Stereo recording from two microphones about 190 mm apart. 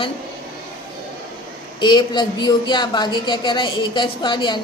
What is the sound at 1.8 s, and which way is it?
A woman's voice, 25° left (ahead or behind).